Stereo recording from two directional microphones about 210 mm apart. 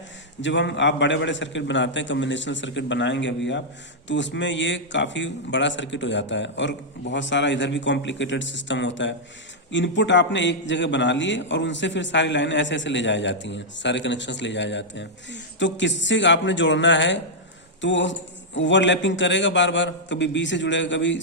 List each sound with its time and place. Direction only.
0.4 s a man's voice: 60° left (ahead or behind)